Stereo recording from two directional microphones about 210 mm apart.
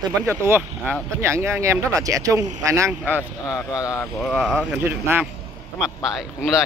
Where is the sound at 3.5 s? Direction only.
15° left (ahead or behind).